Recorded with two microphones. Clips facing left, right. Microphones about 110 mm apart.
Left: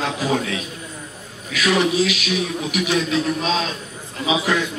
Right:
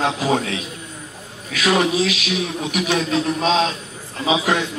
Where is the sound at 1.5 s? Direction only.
40° right (ahead or behind).